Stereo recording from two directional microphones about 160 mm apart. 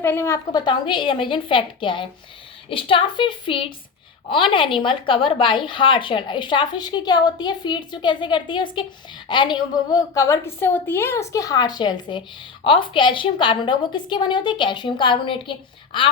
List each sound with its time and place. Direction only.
0.0 s a woman's voice: 15° left (ahead or behind)
0.5 s a woman's voice: 30° left (ahead or behind)